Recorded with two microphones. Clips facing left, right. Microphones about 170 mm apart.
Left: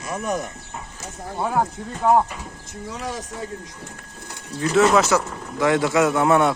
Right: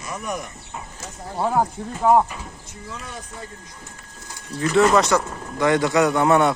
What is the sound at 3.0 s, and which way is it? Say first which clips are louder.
Speech: left 7 dB; 90° left.